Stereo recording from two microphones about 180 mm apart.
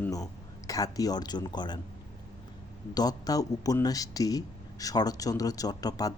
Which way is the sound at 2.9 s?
20° left (ahead or behind).